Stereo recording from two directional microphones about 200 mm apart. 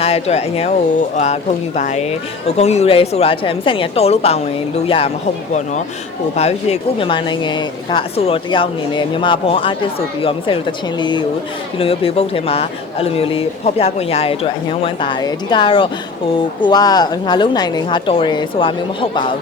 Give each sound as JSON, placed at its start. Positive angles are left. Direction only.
{"t": 0.0, "sound": "speech", "side_deg": 30}
{"t": 6.3, "sound": "speech", "side_deg": 30}